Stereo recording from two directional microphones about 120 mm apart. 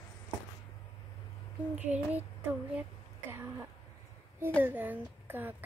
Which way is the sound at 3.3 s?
20° right (ahead or behind).